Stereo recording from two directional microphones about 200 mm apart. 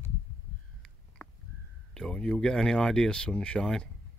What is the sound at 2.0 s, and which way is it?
Speech, 5° left (ahead or behind).